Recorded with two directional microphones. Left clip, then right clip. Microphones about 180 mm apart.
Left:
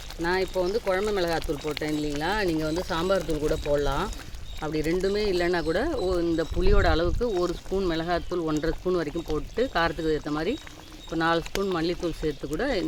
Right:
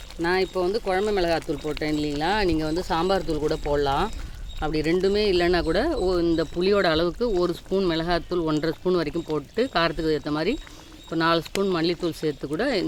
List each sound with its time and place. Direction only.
0.2 s speech: 45° right (ahead or behind)